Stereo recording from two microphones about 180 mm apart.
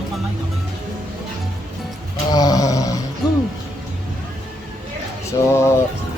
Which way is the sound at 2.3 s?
20° left (ahead or behind).